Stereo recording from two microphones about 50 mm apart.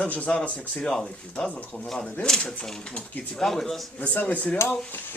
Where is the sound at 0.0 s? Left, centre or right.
Left.